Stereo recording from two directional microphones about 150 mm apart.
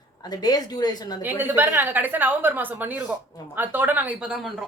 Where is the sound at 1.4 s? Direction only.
15° right (ahead or behind).